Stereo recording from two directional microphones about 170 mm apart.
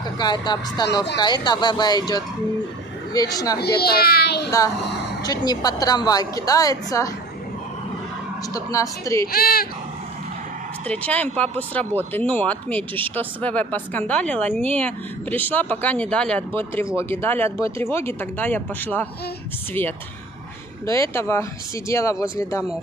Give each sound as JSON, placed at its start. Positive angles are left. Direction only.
{"t": 0.2, "sound": "a woman's voice", "side_deg": 25}
{"t": 3.5, "sound": "speech", "side_deg": 70}
{"t": 5.2, "sound": "a woman's voice", "side_deg": 25}
{"t": 8.5, "sound": "speech", "side_deg": 20}
{"t": 9.3, "sound": "speech", "side_deg": 60}
{"t": 10.9, "sound": "speech", "side_deg": 10}
{"t": 20.8, "sound": "speech", "side_deg": 15}